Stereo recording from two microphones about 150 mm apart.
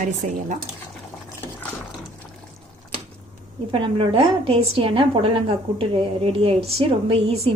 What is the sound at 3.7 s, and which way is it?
A woman's voice, 35° right (ahead or behind).